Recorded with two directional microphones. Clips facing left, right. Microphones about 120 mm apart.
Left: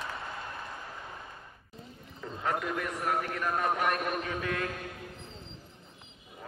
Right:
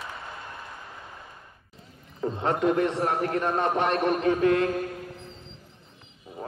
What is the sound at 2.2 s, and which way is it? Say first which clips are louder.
A man's voice: right 7 dB; 30° right (ahead or behind).